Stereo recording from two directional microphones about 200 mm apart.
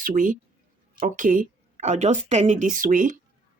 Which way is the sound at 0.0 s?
40° right (ahead or behind).